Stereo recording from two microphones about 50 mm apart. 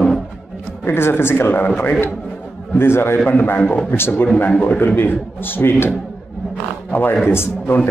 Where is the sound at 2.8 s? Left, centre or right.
Left.